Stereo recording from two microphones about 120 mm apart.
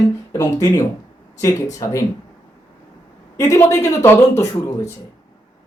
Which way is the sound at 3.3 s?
25° left (ahead or behind).